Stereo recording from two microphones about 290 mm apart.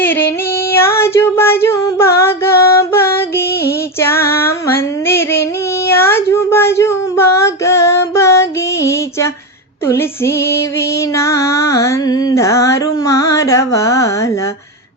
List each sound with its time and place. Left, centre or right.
0.0 s female singing: centre
3.5 s female singing: left
4.0 s female singing: centre
4.8 s child singing: centre
9.8 s female singing: centre